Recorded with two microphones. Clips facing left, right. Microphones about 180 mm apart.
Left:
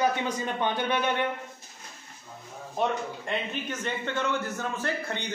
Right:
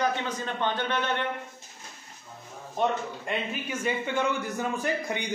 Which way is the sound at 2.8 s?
5° right (ahead or behind).